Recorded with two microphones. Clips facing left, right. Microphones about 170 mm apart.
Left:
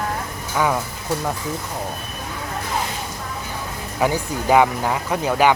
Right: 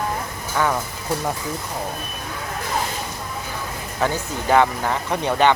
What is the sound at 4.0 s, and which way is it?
Speech, 10° left (ahead or behind).